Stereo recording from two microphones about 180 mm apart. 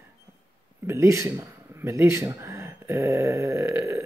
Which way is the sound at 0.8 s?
15° right (ahead or behind).